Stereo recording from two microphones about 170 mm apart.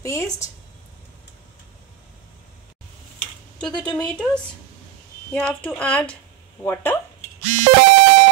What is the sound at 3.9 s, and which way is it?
Speech, 5° left (ahead or behind).